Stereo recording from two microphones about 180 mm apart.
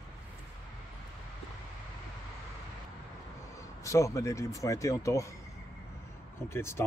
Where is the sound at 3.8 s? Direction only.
15° left (ahead or behind).